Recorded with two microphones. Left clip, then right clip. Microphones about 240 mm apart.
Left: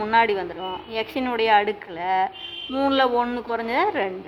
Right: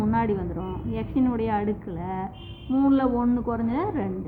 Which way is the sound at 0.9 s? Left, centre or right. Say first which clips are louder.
Left 2 dB; left.